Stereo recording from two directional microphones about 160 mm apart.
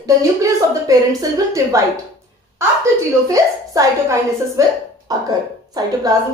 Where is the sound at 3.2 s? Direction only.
20° right (ahead or behind).